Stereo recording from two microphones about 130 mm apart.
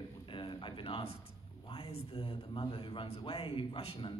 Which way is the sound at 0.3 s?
40° left (ahead or behind).